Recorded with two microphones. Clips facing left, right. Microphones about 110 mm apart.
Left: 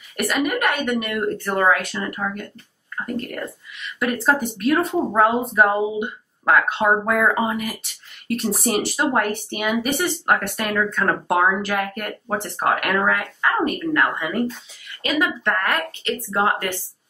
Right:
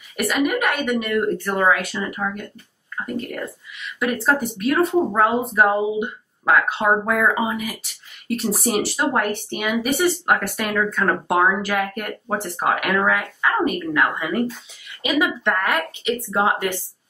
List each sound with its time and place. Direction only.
0.2 s speech: centre (ahead or behind)
15.0 s speech: 15° right (ahead or behind)